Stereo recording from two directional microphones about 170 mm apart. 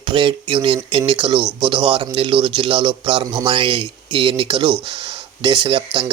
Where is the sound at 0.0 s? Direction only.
30° right (ahead or behind).